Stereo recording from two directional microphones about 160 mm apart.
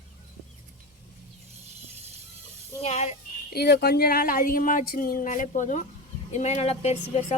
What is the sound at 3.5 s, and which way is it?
Speech, 85° left.